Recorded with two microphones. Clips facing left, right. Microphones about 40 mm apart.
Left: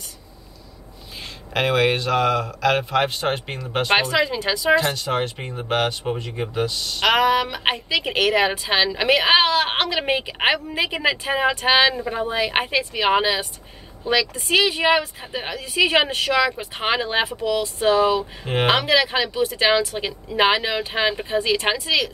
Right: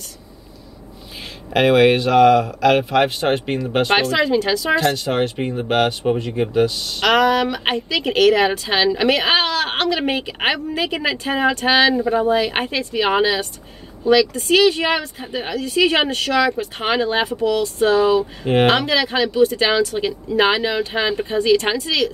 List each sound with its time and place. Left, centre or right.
1.5 s speech: centre
18.7 s speech: centre